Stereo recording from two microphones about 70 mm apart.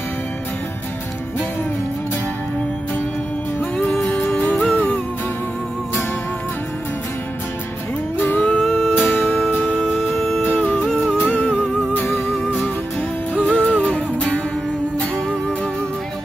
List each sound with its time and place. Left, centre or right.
4.0 s music: left
8.2 s music: left
8.5 s music: centre
9.0 s music: left
9.8 s music: centre
10.4 s music: left